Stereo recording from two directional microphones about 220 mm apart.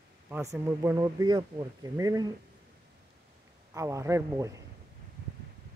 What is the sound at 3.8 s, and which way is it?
Speech, 15° right (ahead or behind).